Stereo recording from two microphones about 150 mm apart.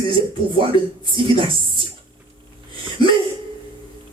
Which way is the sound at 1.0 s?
35° right (ahead or behind).